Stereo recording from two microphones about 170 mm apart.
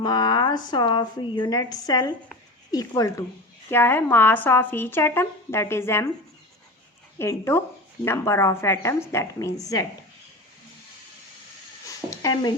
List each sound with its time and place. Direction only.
0.0 s a woman's voice: 25° left (ahead or behind)
7.2 s speech: 15° left (ahead or behind)
11.9 s speech: 20° left (ahead or behind)